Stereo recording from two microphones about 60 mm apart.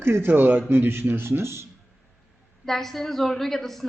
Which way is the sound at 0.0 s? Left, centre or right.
Right.